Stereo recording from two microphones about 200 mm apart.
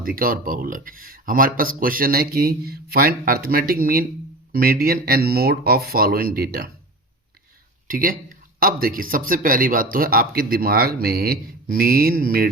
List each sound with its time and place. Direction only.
0.0 s speech: 45° right (ahead or behind)
7.9 s speech: 45° right (ahead or behind)